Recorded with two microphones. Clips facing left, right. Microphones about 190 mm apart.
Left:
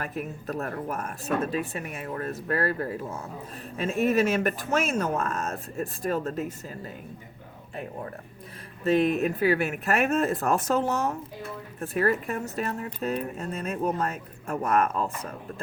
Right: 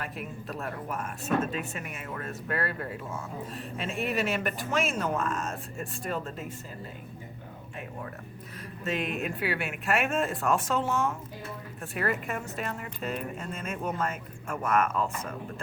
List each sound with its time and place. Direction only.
0.0 s speech: 45° left (ahead or behind)
8.8 s speech: 35° left (ahead or behind)